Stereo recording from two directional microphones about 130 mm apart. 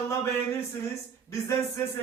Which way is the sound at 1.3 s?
25° left (ahead or behind).